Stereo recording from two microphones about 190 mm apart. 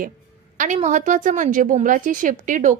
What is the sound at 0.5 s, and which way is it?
A woman's voice, 40° right (ahead or behind).